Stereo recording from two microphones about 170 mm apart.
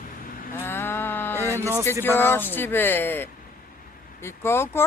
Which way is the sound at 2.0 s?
10° left (ahead or behind).